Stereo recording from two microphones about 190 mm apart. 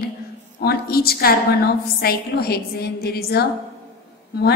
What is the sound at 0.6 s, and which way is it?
A woman's voice, 55° left (ahead or behind).